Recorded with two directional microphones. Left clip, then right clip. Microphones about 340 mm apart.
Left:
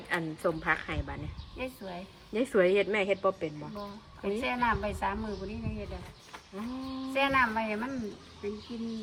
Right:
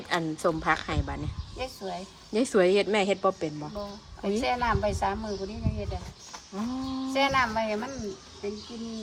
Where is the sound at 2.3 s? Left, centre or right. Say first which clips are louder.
Right 3 dB; centre.